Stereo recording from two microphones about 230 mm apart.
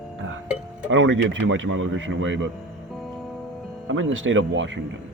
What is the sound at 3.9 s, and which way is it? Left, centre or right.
Speech, right.